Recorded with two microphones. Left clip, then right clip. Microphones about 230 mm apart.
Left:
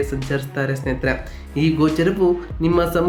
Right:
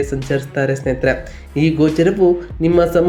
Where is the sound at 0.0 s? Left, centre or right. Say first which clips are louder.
Right 4 dB; centre.